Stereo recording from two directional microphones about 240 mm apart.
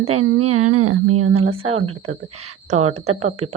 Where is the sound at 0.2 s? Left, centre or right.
Right.